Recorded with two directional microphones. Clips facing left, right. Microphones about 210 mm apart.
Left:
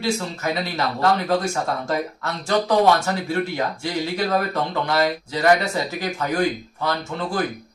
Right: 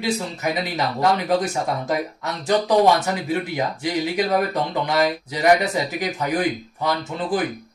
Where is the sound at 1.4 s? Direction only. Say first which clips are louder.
Right 1 dB; 20° right (ahead or behind).